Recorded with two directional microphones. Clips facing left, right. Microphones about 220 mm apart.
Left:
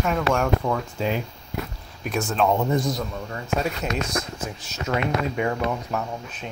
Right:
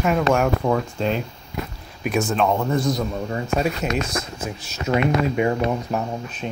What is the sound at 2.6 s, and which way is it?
Speech, 15° left (ahead or behind).